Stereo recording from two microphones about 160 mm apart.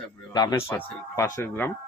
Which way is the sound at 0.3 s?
25° left (ahead or behind).